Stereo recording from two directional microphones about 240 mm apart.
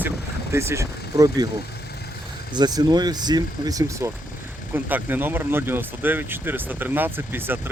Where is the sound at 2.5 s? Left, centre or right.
Centre.